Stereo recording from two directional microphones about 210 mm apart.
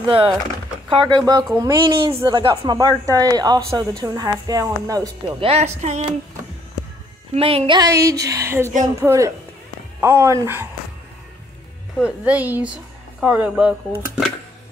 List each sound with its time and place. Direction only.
0.0 s speech: 25° right (ahead or behind)
5.5 s speech: 30° right (ahead or behind)
7.3 s speech: 25° right (ahead or behind)
12.0 s speech: 5° right (ahead or behind)